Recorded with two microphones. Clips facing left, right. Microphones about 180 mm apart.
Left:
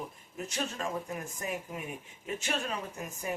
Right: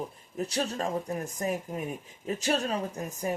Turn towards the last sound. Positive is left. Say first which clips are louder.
# right 6 dB
turn(degrees=-40)  # may be behind; listen again after turning